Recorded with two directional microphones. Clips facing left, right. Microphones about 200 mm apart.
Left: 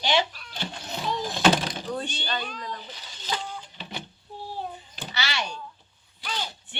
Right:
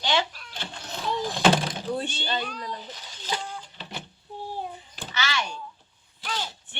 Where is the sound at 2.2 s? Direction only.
20° right (ahead or behind).